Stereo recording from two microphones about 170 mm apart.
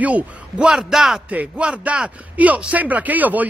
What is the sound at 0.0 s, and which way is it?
A man's voice, 5° right (ahead or behind).